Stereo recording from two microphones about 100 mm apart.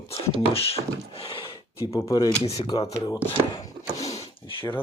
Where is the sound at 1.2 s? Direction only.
65° left (ahead or behind).